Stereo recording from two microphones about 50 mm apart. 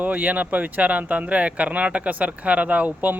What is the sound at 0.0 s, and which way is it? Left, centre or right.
Speech, right.